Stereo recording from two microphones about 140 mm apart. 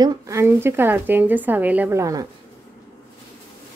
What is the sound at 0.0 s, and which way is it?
Speech, 30° right (ahead or behind).